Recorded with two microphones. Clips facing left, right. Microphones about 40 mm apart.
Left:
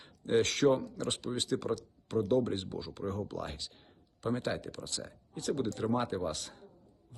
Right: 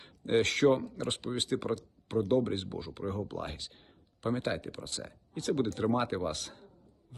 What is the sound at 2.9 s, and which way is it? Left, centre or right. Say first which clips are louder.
Speech: right 1 dB; right.